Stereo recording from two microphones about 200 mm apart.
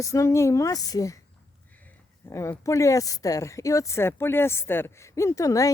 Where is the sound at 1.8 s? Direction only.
15° left (ahead or behind).